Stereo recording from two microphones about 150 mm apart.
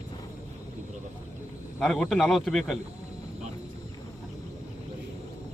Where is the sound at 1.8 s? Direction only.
5° left (ahead or behind).